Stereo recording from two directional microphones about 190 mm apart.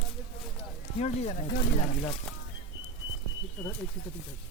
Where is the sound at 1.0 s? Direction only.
35° left (ahead or behind).